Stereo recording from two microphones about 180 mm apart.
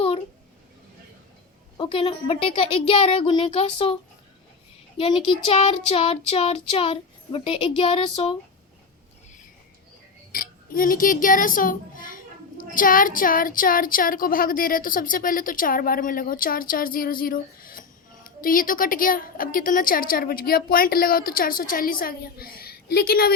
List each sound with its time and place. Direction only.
1.8 s child singing: 30° left (ahead or behind)
4.9 s child singing: 30° left (ahead or behind)
10.3 s speech: 55° left (ahead or behind)